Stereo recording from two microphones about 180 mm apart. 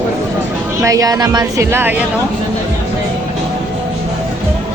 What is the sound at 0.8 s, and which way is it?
Speech, 20° right (ahead or behind).